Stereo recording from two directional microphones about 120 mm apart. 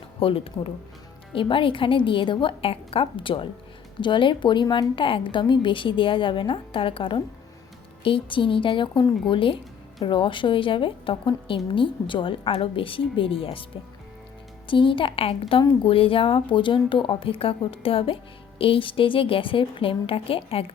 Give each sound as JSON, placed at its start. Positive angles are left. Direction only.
{"t": 0.2, "sound": "a woman's voice", "side_deg": 50}
{"t": 14.7, "sound": "a woman's voice", "side_deg": 45}